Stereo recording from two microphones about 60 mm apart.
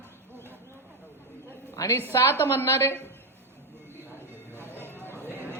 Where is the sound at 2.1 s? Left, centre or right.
Left.